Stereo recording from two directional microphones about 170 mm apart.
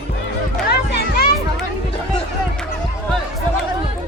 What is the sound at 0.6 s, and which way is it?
Music, 65° left (ahead or behind).